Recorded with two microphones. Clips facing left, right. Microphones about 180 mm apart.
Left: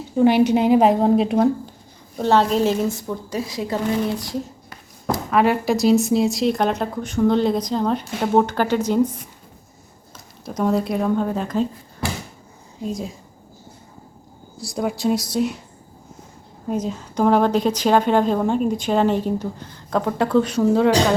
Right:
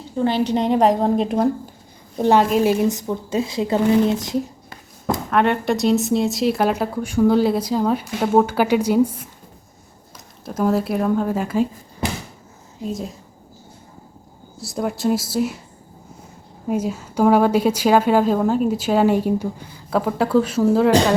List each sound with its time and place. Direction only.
0.2 s speech: 10° left (ahead or behind)
2.1 s a woman's voice: 15° right (ahead or behind)
5.3 s speech: centre (ahead or behind)
10.4 s speech: 5° right (ahead or behind)
12.0 s a sound: 20° right (ahead or behind)
12.8 s speech: centre (ahead or behind)
14.6 s speech: centre (ahead or behind)
16.6 s speech: 10° right (ahead or behind)